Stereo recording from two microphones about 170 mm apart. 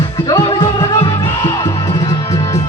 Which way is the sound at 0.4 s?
30° left (ahead or behind).